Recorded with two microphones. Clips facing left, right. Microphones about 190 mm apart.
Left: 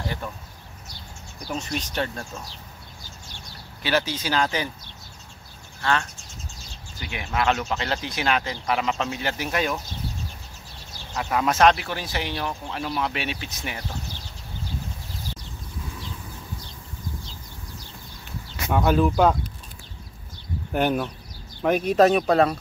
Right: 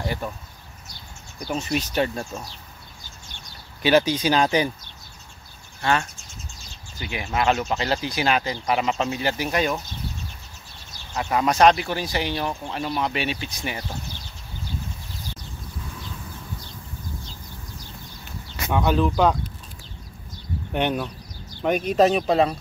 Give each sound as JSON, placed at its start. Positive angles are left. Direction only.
{"t": 1.5, "sound": "speech", "side_deg": -5}
{"t": 3.8, "sound": "speech", "side_deg": -15}
{"t": 5.8, "sound": "speech", "side_deg": -15}
{"t": 7.0, "sound": "speech", "side_deg": 0}
{"t": 11.1, "sound": "speech", "side_deg": 0}
{"t": 18.7, "sound": "speech", "side_deg": 5}
{"t": 20.7, "sound": "speech", "side_deg": 5}